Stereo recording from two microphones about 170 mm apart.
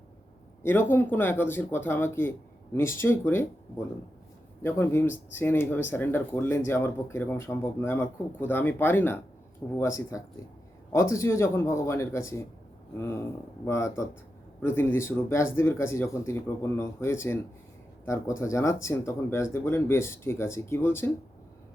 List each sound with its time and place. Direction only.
0.6 s speech: 15° left (ahead or behind)